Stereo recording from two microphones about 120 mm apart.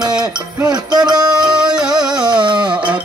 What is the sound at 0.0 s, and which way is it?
Music, 35° right (ahead or behind).